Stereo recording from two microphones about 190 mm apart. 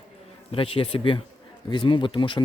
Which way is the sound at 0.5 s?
30° left (ahead or behind).